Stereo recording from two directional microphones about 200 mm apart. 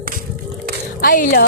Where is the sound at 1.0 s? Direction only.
40° left (ahead or behind).